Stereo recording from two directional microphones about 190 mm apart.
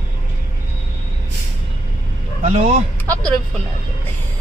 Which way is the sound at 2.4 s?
35° right (ahead or behind).